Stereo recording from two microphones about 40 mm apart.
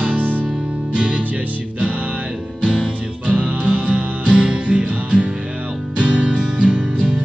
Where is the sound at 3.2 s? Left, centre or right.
Right.